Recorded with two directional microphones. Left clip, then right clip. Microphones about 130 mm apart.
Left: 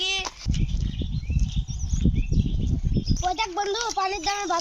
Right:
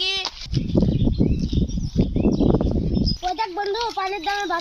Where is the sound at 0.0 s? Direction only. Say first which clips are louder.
Right 3 dB; 5° left (ahead or behind).